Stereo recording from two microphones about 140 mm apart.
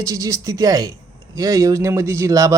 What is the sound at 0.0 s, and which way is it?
A man's voice, 20° right (ahead or behind).